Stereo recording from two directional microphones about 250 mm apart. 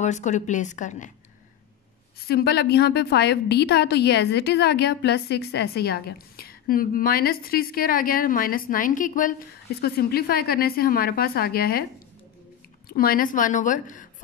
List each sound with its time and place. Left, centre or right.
0.0 s a woman's voice: left
2.1 s a woman's voice: left
12.8 s a woman's voice: left